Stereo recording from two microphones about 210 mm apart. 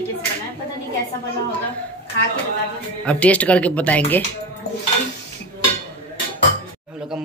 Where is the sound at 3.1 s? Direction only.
5° left (ahead or behind).